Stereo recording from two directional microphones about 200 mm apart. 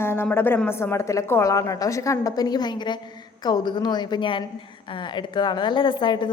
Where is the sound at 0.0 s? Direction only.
10° left (ahead or behind).